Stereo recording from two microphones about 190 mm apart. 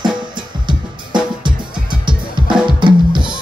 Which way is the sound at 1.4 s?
25° right (ahead or behind).